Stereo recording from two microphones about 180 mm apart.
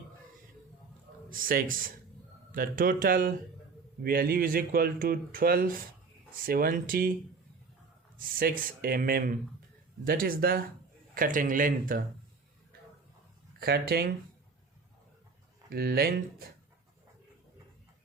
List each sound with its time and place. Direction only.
1.3 s speech: 50° right (ahead or behind)
8.4 s speech: 50° right (ahead or behind)
13.6 s speech: 60° right (ahead or behind)
15.7 s speech: 60° right (ahead or behind)